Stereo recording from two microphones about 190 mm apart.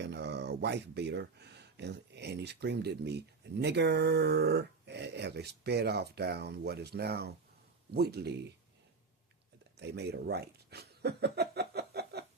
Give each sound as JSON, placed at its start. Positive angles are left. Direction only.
{"t": 0.0, "sound": "speech", "side_deg": -65}
{"t": 9.7, "sound": "chuckle", "side_deg": -60}